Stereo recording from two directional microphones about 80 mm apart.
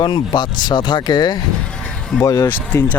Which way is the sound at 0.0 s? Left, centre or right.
Left.